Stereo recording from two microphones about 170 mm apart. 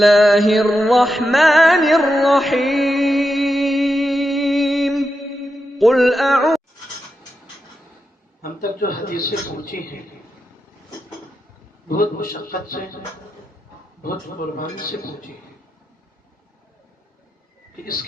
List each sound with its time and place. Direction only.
0.0 s music: centre (ahead or behind)
8.4 s a man's voice: 55° left (ahead or behind)
11.9 s a man's voice: 60° left (ahead or behind)
14.5 s a man's voice: 55° left (ahead or behind)